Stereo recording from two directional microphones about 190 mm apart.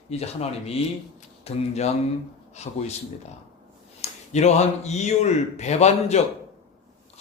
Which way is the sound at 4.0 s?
35° left (ahead or behind).